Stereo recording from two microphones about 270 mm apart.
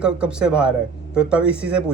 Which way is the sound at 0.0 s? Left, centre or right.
Centre.